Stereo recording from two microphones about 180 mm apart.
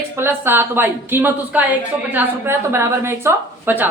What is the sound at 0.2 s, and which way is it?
A woman's voice, 10° right (ahead or behind).